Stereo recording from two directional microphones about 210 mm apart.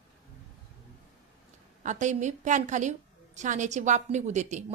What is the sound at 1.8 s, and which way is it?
A woman's voice, 35° right (ahead or behind).